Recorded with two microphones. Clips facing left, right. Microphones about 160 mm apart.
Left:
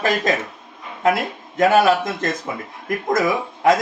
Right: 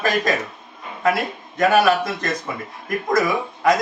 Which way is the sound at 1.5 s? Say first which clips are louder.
Left 2 dB; 25° left (ahead or behind).